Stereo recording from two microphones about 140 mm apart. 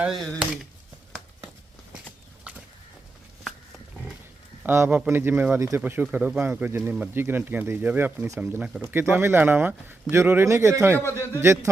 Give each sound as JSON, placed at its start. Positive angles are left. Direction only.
{"t": 0.0, "sound": "speech", "side_deg": 0}
{"t": 4.6, "sound": "a man's voice", "side_deg": -15}